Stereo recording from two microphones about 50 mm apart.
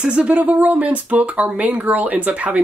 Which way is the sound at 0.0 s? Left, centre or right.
Right.